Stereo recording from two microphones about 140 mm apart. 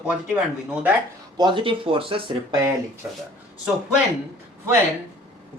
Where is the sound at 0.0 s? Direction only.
10° right (ahead or behind).